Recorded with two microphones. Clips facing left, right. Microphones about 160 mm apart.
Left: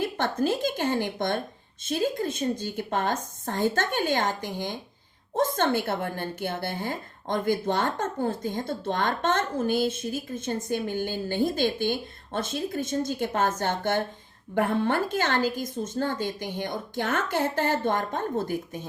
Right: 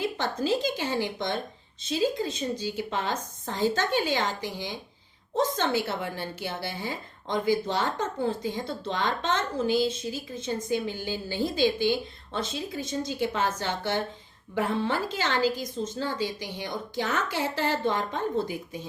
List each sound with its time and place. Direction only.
0.0 s a woman's voice: 55° left (ahead or behind)